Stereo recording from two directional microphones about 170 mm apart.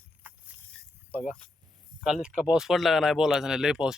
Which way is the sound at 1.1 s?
10° left (ahead or behind).